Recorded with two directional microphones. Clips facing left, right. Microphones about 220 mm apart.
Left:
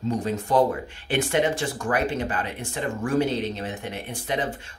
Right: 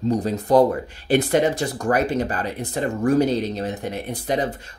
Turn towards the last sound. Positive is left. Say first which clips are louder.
# right 5 dB
turn(degrees=-40)  # may be behind; listen again after turning